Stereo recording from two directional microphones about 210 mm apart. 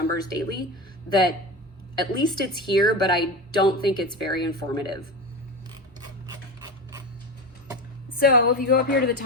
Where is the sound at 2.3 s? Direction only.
20° left (ahead or behind).